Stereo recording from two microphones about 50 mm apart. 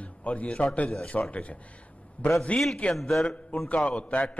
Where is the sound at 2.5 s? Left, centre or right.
Left.